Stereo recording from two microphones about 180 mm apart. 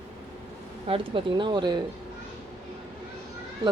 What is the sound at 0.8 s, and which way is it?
Speech, 30° right (ahead or behind).